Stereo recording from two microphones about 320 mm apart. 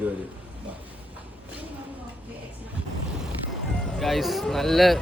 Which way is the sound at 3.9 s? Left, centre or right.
Centre.